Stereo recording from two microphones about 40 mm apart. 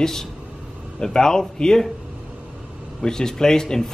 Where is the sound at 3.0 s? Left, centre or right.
Centre.